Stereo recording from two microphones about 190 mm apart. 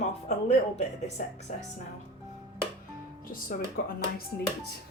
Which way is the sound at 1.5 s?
40° left (ahead or behind).